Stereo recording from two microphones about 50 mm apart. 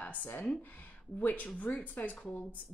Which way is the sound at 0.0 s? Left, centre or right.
Left.